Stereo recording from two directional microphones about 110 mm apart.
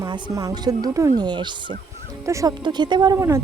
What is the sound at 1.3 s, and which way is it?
Speech, 45° right (ahead or behind).